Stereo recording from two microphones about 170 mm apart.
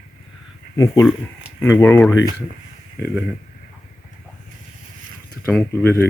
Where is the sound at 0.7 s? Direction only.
20° left (ahead or behind).